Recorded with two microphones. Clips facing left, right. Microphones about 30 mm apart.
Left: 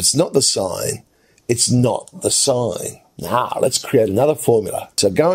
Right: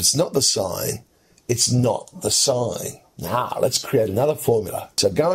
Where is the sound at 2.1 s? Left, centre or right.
Left.